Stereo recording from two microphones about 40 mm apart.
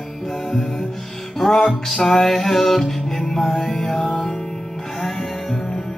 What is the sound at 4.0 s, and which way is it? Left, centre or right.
Music, centre.